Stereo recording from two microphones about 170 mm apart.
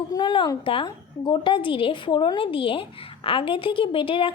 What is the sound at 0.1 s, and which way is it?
A woman's voice, 25° left (ahead or behind).